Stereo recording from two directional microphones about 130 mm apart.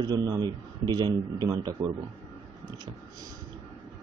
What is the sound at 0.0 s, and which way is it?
Speech, 30° right (ahead or behind).